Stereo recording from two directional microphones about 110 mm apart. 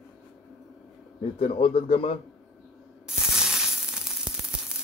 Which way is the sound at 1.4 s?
55° left (ahead or behind).